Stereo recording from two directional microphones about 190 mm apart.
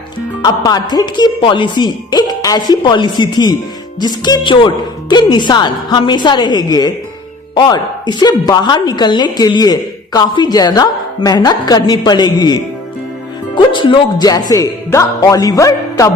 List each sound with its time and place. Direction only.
0.4 s a woman's voice: 20° left (ahead or behind)